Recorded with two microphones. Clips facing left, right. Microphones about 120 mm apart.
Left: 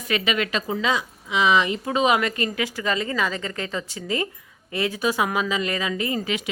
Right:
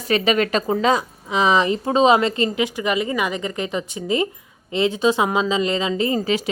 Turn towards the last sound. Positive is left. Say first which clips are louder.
# right 6 dB
turn(degrees=-35)  # may be behind; listen again after turning